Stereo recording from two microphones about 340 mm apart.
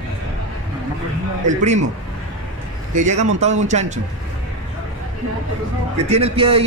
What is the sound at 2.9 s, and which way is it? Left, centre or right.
A man's voice, right.